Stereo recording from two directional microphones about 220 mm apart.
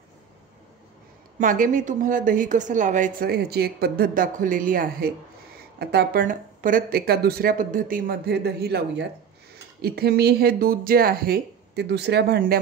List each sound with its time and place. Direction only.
1.4 s a woman's voice: 35° right (ahead or behind)